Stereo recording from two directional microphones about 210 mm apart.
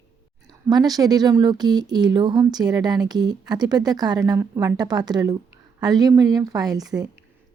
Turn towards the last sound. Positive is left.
turn(degrees=-15)  # may be behind; listen again after turning